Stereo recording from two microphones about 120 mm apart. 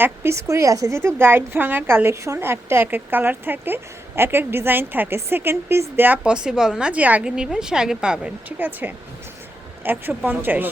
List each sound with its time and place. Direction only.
0.0 s a woman's voice: 20° right (ahead or behind)